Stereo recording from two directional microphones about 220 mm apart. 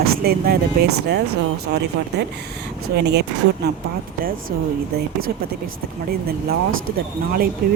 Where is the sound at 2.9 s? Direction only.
50° right (ahead or behind).